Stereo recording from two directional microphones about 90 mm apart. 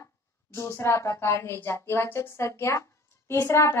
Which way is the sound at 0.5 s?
35° left (ahead or behind).